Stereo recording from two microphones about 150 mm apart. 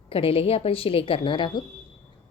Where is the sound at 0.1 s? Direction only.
40° left (ahead or behind).